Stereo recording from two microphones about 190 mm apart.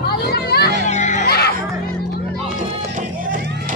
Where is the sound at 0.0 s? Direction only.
55° left (ahead or behind).